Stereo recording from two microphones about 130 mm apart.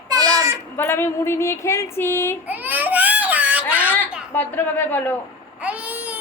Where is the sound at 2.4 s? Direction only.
15° right (ahead or behind).